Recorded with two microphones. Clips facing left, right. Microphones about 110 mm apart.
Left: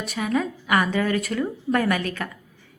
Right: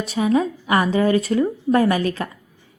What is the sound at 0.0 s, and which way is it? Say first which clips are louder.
A woman's voice: right 6 dB; 30° right (ahead or behind).